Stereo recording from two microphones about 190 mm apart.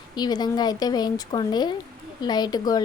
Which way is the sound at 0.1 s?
20° left (ahead or behind).